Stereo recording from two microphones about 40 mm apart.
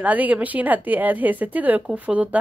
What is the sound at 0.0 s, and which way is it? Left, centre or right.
A woman's voice, right.